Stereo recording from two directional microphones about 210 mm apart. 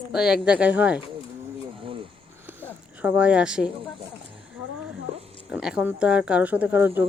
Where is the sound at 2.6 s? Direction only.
10° right (ahead or behind).